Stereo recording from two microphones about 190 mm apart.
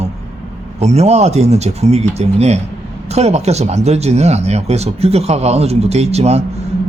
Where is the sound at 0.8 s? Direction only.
35° right (ahead or behind).